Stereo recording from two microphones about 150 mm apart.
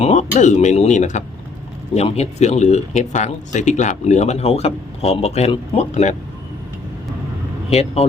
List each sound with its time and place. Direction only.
0.0 s speech: 50° left (ahead or behind)
7.7 s speech: 45° left (ahead or behind)